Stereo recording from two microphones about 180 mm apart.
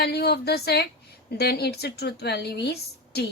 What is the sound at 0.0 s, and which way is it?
A woman's voice, 65° left (ahead or behind).